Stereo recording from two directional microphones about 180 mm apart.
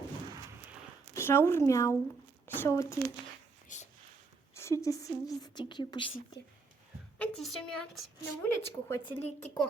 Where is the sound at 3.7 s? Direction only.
45° left (ahead or behind).